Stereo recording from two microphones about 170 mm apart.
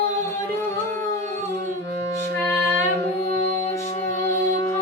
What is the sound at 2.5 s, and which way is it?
Child singing, 15° left (ahead or behind).